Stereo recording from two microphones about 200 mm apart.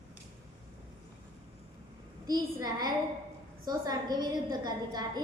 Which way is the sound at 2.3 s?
20° right (ahead or behind).